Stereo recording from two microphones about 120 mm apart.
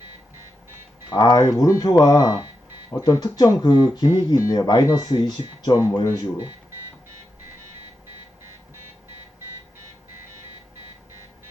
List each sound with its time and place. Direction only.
1.1 s speech: 35° left (ahead or behind)